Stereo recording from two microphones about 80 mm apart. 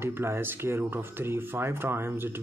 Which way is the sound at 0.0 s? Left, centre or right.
Right.